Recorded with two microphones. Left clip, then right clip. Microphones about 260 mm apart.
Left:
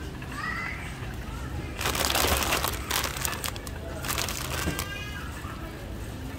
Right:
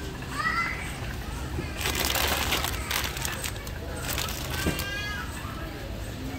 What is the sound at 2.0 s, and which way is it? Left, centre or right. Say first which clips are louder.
Crumpling: left 2 dB; left.